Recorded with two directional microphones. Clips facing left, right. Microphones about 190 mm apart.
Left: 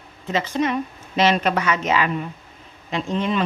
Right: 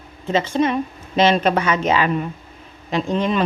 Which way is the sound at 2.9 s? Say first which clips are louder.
Right 3 dB; 40° right (ahead or behind).